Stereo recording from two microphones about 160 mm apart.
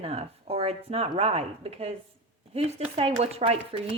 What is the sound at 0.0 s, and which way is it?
Speech, 40° right (ahead or behind).